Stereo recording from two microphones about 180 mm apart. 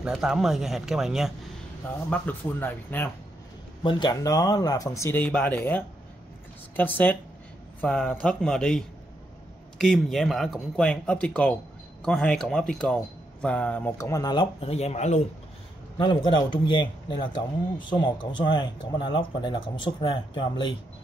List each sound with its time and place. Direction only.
0.0 s a man's voice: centre (ahead or behind)
2.0 s speech: 10° left (ahead or behind)
3.8 s a man's voice: 25° left (ahead or behind)
16.0 s speech: 25° left (ahead or behind)